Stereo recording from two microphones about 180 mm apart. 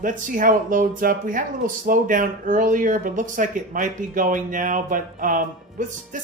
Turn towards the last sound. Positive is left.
turn(degrees=-45)  # may be behind; listen again after turning